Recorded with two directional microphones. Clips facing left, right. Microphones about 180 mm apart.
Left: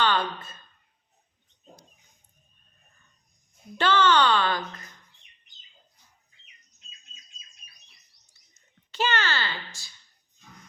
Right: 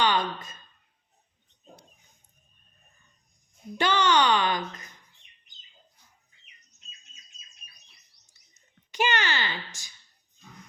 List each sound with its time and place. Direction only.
0.0 s a sound: 15° right (ahead or behind)
3.8 s a child's voice: 15° right (ahead or behind)
8.9 s a child's voice: 15° right (ahead or behind)